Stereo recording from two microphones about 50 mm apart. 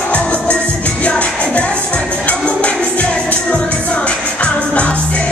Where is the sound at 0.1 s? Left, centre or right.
Left.